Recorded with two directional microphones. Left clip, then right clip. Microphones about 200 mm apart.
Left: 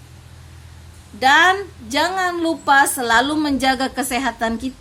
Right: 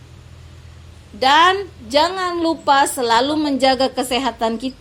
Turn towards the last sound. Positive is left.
turn(degrees=25)  # may be behind; listen again after turning